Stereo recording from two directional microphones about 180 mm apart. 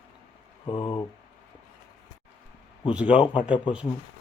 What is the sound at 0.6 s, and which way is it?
Speech, 25° left (ahead or behind).